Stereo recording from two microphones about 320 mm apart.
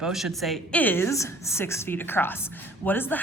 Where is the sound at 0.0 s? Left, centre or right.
Centre.